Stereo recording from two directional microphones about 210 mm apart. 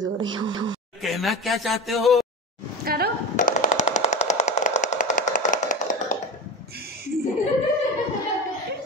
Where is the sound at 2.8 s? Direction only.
45° right (ahead or behind).